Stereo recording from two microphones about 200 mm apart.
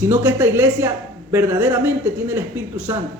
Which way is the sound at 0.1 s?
10° right (ahead or behind).